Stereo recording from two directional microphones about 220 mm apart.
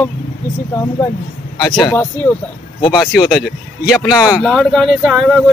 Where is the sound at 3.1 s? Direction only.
Centre (ahead or behind).